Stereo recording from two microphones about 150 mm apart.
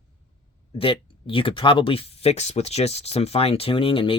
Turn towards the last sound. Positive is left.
turn(degrees=35)  # may be behind; listen again after turning